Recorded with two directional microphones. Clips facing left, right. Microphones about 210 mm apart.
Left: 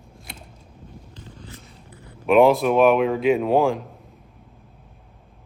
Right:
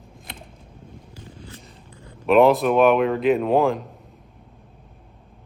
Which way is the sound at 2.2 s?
Centre (ahead or behind).